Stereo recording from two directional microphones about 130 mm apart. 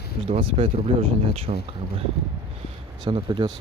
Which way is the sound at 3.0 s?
35° right (ahead or behind).